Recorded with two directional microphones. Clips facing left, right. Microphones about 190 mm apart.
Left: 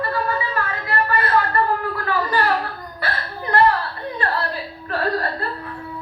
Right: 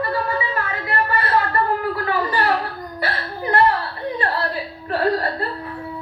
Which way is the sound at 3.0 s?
20° right (ahead or behind).